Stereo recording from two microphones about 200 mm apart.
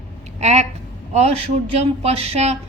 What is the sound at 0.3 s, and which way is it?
Speech, 35° right (ahead or behind).